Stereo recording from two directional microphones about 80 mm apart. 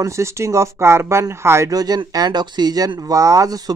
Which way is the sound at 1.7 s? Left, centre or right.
Right.